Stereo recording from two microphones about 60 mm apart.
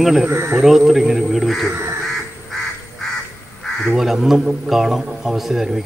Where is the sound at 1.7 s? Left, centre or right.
Right.